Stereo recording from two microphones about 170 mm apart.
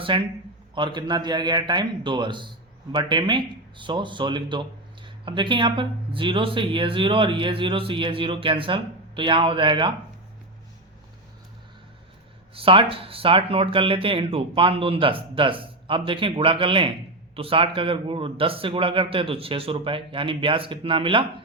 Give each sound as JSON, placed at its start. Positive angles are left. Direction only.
{"t": 0.0, "sound": "a man's voice", "side_deg": -30}
{"t": 12.5, "sound": "speech", "side_deg": -30}